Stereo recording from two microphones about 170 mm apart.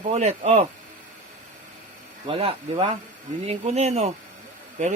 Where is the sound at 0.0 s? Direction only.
40° right (ahead or behind).